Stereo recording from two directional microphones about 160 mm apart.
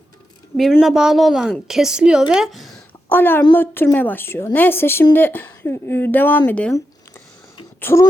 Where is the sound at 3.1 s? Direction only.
15° left (ahead or behind).